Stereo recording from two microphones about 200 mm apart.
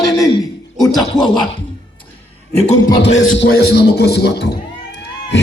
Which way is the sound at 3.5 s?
55° left (ahead or behind).